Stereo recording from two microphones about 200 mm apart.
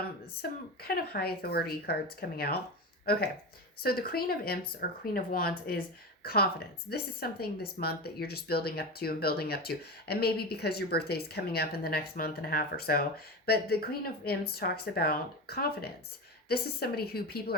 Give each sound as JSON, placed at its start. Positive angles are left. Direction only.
{"t": 0.8, "sound": "speech", "side_deg": 50}
{"t": 3.8, "sound": "speech", "side_deg": 50}